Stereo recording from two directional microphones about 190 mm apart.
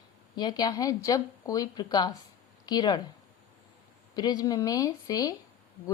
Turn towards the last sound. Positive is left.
turn(degrees=20)  # may be behind; listen again after turning